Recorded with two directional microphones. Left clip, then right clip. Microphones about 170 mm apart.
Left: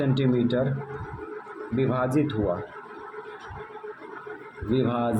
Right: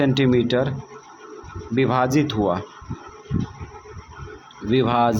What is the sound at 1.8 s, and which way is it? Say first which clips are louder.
Speech: right 6 dB; 50° right (ahead or behind).